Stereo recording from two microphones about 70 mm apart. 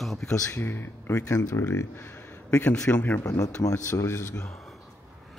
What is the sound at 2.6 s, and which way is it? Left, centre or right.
Speech, left.